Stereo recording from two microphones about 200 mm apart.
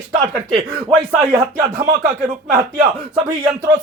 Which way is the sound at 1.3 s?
35° right (ahead or behind).